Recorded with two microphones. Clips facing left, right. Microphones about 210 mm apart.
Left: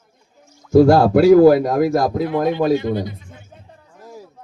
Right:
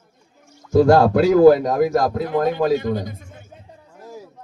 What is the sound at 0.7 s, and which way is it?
Speech, 10° left (ahead or behind).